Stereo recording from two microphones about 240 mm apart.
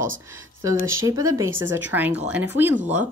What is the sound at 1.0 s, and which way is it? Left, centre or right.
Speech, centre.